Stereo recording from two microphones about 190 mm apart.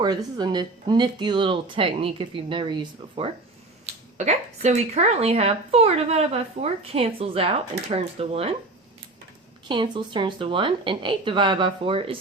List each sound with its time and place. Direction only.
0.0 s speech: 20° right (ahead or behind)
4.2 s a woman's voice: 35° right (ahead or behind)
9.6 s speech: 25° right (ahead or behind)